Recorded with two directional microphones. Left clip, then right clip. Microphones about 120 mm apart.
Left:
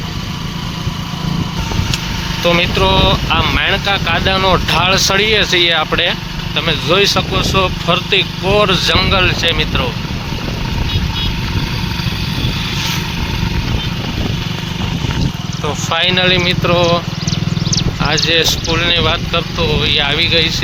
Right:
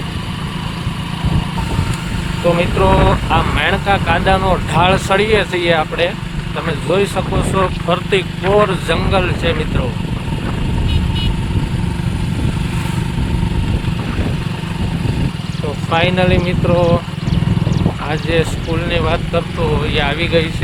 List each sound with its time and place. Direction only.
2.6 s speech: 5° right (ahead or behind)
7.5 s speech: 35° right (ahead or behind)
8.9 s speech: 10° right (ahead or behind)
15.9 s speech: 5° right (ahead or behind)
18.1 s speech: 5° right (ahead or behind)